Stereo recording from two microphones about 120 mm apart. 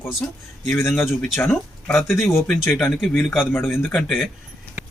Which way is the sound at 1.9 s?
5° left (ahead or behind).